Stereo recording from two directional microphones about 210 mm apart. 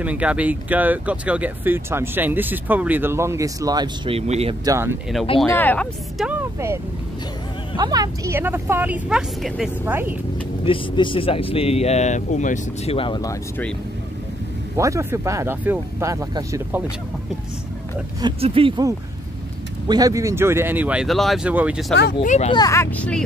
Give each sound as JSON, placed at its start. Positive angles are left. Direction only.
{"t": 0.0, "sound": "speech", "side_deg": -5}
{"t": 4.6, "sound": "speech", "side_deg": -15}
{"t": 5.4, "sound": "speech", "side_deg": 10}
{"t": 6.2, "sound": "speech", "side_deg": -10}
{"t": 10.6, "sound": "speech", "side_deg": 25}
{"t": 14.8, "sound": "speech", "side_deg": -15}
{"t": 18.2, "sound": "speech", "side_deg": -25}
{"t": 22.2, "sound": "speech", "side_deg": 35}
{"t": 22.5, "sound": "speech", "side_deg": 15}